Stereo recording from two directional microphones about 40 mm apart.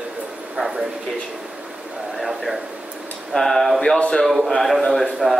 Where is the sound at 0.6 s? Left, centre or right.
Centre.